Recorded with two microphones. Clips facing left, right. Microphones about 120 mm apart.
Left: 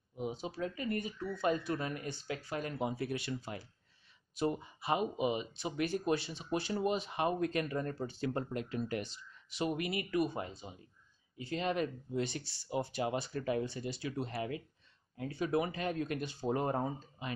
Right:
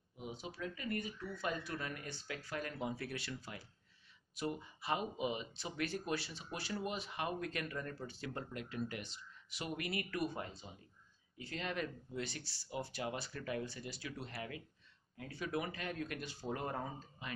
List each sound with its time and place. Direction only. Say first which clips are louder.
0.2 s speech: left 7 dB; 30° left (ahead or behind)
9.5 s speech: left 7 dB; 25° left (ahead or behind)